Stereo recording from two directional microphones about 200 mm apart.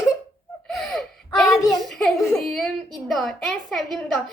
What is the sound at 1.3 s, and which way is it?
Child singing, centre (ahead or behind).